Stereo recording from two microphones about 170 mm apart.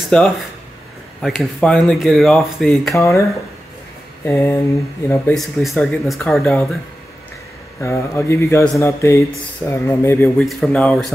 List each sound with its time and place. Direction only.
0.1 s speech: 5° left (ahead or behind)
2.9 s speech: 15° left (ahead or behind)
4.3 s speech: 15° left (ahead or behind)
5.3 s speech: centre (ahead or behind)
7.8 s speech: 15° left (ahead or behind)
10.4 s speech: centre (ahead or behind)